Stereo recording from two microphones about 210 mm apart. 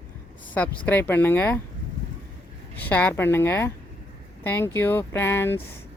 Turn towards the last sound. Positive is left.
turn(degrees=10)  # may be behind; listen again after turning